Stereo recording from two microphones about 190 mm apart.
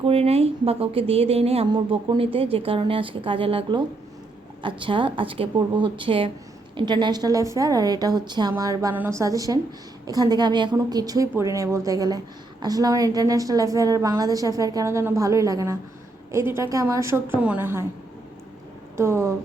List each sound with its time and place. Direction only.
0.0 s a woman's voice: 30° right (ahead or behind); by 17.8 s 10° right (ahead or behind)
18.9 s a woman's voice: 15° right (ahead or behind)